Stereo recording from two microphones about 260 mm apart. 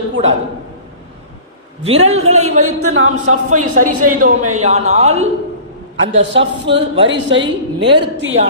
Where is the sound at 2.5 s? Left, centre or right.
Right.